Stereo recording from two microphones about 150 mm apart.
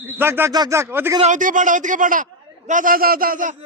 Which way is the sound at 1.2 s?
55° right (ahead or behind).